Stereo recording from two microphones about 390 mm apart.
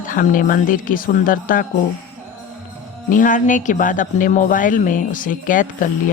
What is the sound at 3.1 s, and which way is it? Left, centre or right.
Speech, centre.